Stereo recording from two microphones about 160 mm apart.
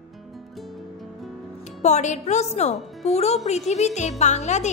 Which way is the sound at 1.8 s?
45° left (ahead or behind).